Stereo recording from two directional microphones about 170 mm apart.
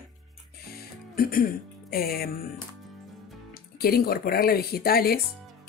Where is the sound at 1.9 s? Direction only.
60° left (ahead or behind).